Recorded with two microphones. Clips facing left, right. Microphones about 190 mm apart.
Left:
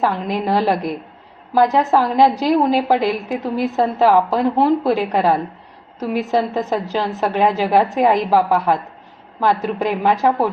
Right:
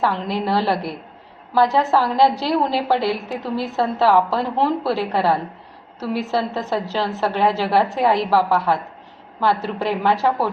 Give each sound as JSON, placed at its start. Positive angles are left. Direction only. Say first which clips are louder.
{"t": 0.0, "sound": "a woman's voice", "louder": "left 2 dB", "side_deg": 15}